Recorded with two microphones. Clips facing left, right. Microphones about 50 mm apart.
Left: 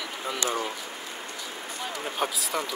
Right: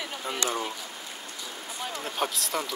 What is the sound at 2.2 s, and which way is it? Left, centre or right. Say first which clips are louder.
Speech: even; centre.